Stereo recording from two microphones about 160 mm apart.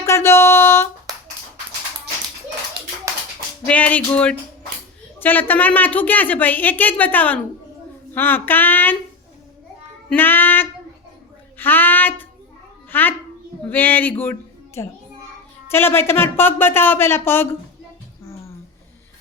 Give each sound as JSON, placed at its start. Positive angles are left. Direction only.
{"t": 0.0, "sound": "music", "side_deg": 15}
{"t": 3.7, "sound": "a woman's voice", "side_deg": 10}
{"t": 10.1, "sound": "a woman's voice", "side_deg": 10}
{"t": 15.7, "sound": "a woman's voice", "side_deg": 15}